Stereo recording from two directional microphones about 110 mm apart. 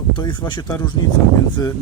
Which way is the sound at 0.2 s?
40° left (ahead or behind).